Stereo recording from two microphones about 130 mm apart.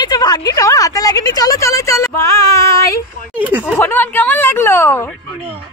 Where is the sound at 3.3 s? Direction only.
10° right (ahead or behind).